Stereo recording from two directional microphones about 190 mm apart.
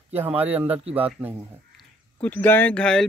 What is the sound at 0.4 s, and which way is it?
Speech, 10° right (ahead or behind).